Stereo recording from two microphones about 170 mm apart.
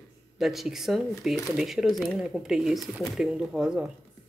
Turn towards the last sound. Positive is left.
turn(degrees=-5)  # may be behind; listen again after turning